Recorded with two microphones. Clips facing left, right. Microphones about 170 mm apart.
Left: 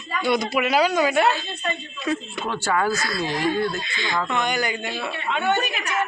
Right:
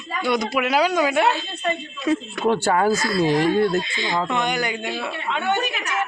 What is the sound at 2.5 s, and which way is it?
Speech, 60° right (ahead or behind).